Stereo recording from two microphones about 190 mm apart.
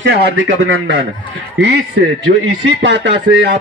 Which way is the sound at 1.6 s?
65° right (ahead or behind).